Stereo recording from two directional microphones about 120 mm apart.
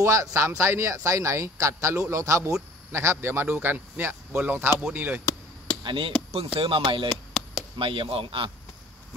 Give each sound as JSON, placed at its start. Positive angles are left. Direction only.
{"t": 0.0, "sound": "a man's voice", "side_deg": -25}
{"t": 5.9, "sound": "speech", "side_deg": -45}
{"t": 7.1, "sound": "a sound", "side_deg": 0}
{"t": 7.7, "sound": "speech", "side_deg": -45}